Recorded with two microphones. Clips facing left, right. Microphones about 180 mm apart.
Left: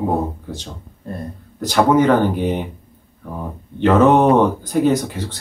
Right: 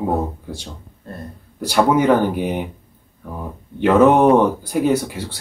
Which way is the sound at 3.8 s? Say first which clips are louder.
Even; 10° right (ahead or behind).